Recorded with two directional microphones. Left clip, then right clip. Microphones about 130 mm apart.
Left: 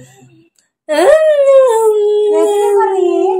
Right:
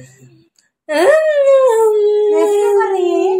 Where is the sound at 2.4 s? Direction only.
45° left (ahead or behind).